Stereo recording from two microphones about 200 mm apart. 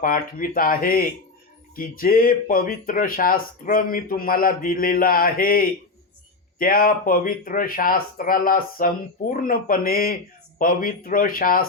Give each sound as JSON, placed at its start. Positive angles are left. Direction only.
{"t": 0.0, "sound": "speech", "side_deg": 45}